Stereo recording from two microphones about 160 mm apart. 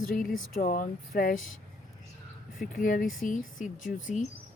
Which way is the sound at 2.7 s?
55° left (ahead or behind).